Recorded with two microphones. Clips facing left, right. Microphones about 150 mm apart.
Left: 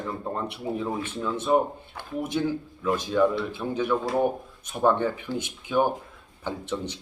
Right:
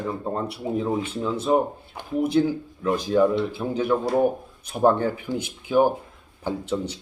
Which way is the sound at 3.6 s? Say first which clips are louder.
Right 2 dB; 10° right (ahead or behind).